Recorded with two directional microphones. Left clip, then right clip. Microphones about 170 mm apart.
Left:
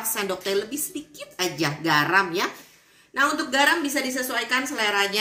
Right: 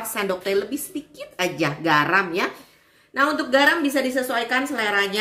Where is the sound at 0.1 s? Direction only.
40° right (ahead or behind).